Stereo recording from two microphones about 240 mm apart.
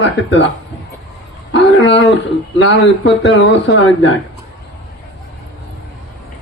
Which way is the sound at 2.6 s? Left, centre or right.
Left.